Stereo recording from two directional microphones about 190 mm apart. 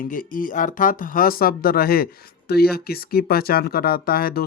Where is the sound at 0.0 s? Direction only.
45° left (ahead or behind).